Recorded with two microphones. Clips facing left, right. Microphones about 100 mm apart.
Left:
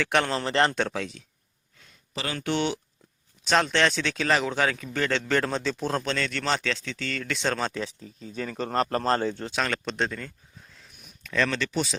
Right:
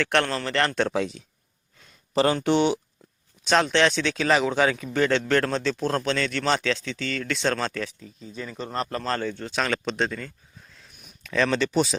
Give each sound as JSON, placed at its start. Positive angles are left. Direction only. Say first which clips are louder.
{"t": 0.0, "sound": "speech", "louder": "right 1 dB", "side_deg": 5}
{"t": 0.3, "sound": "a man's voice", "louder": "left 1 dB", "side_deg": 25}
{"t": 0.9, "sound": "speech", "louder": "right 6 dB", "side_deg": -15}
{"t": 2.1, "sound": "speech", "louder": "right 12 dB", "side_deg": -35}
{"t": 2.4, "sound": "speech", "louder": "right 6 dB", "side_deg": -20}
{"t": 3.4, "sound": "a man's voice", "louder": "right 2 dB", "side_deg": 0}
{"t": 8.3, "sound": "speech", "louder": "left 3 dB", "side_deg": 45}
{"t": 9.5, "sound": "speech", "louder": "right 2 dB", "side_deg": 0}
{"t": 11.0, "sound": "a sound", "louder": "right 2 dB", "side_deg": -5}
{"t": 11.5, "sound": "speech", "louder": "right 6 dB", "side_deg": -20}